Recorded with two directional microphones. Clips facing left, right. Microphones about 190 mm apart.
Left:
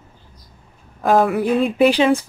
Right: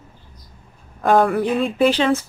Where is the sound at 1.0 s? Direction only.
Centre (ahead or behind).